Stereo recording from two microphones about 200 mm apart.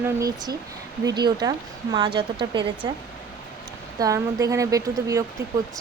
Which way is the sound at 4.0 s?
15° right (ahead or behind).